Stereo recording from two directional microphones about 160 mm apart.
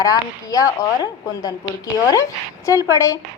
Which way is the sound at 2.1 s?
20° left (ahead or behind).